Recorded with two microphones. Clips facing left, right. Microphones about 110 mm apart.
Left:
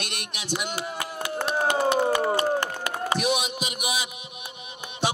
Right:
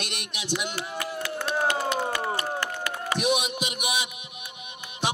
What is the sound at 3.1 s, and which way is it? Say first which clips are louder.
Heart sounds: right 2 dB; 35° left (ahead or behind).